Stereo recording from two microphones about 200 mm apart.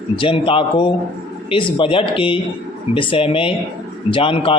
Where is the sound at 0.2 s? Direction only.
25° left (ahead or behind).